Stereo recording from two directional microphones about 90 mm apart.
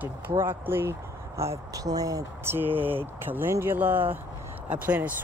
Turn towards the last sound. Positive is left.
turn(degrees=-15)  # may be behind; listen again after turning